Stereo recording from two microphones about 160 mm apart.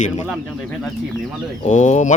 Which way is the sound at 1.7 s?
50° left (ahead or behind).